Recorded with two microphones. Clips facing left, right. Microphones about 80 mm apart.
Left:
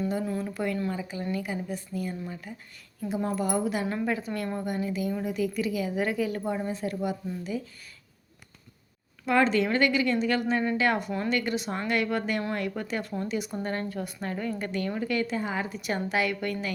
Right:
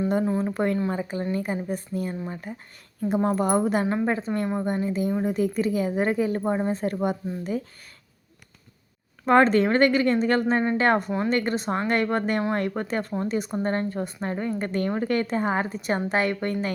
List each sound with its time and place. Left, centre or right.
0.3 s a woman's voice: right
3.8 s a woman's voice: right
9.2 s a woman's voice: right